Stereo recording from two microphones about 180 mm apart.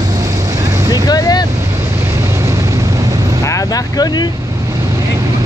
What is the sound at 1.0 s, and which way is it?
Vehicle, 20° left (ahead or behind).